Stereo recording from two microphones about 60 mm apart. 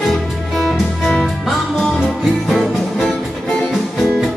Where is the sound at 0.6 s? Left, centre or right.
Centre.